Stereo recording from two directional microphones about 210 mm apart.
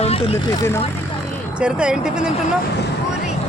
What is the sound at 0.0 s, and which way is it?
Vehicle, 25° left (ahead or behind).